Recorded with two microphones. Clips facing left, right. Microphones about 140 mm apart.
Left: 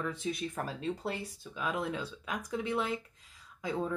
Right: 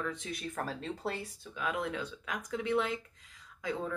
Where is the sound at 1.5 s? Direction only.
30° left (ahead or behind).